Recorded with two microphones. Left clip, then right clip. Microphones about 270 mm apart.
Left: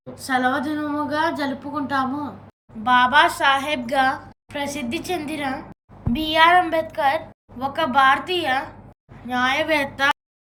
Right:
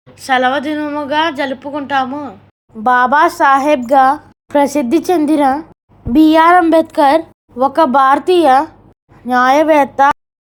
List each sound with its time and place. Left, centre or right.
0.1 s a woman's voice: centre